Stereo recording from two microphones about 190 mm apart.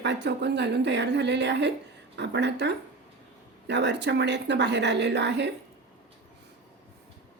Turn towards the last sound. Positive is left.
turn(degrees=-65)  # may be behind; listen again after turning